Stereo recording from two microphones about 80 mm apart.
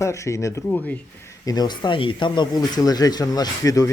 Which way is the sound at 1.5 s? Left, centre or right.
Left.